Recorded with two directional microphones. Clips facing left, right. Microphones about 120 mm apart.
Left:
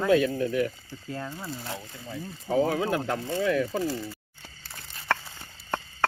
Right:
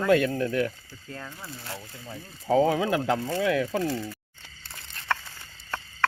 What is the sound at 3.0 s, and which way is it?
Speech, 90° right.